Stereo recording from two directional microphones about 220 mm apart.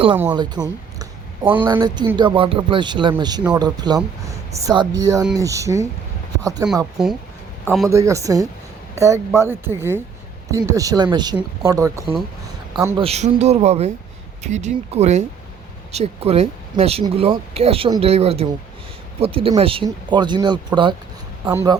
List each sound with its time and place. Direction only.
0.6 s speech: 20° right (ahead or behind)
7.0 s a man's voice: centre (ahead or behind)
7.9 s a man's voice: 15° right (ahead or behind)
13.0 s speech: 30° right (ahead or behind); by 21.8 s 10° right (ahead or behind)